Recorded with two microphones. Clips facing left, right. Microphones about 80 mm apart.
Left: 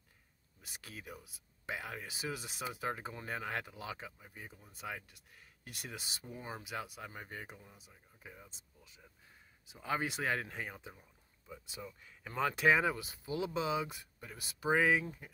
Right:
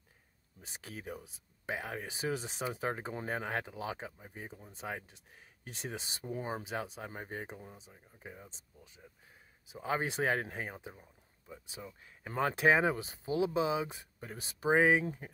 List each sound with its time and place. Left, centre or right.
1.7 s speech: right
9.7 s speech: right
14.2 s speech: right
15.0 s speech: right